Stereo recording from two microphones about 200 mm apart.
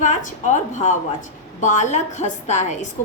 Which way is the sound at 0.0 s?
40° left (ahead or behind).